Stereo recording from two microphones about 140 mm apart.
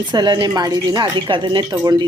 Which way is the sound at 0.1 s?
30° right (ahead or behind).